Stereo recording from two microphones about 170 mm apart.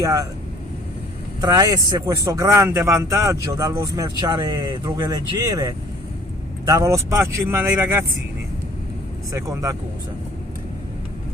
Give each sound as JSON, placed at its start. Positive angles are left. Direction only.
{"t": 0.0, "sound": "speech", "side_deg": -20}
{"t": 1.4, "sound": "speech", "side_deg": -25}
{"t": 9.3, "sound": "speech", "side_deg": -20}